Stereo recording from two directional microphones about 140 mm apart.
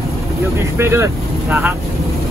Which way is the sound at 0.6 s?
20° right (ahead or behind).